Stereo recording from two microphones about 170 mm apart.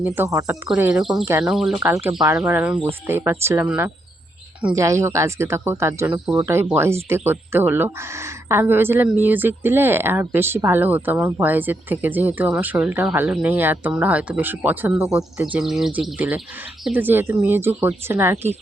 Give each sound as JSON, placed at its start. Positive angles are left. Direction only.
{"t": 0.0, "sound": "speech", "side_deg": -15}
{"t": 1.8, "sound": "speech", "side_deg": -15}